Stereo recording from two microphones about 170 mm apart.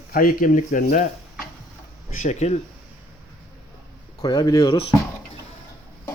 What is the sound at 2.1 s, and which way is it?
Speech, 45° left (ahead or behind).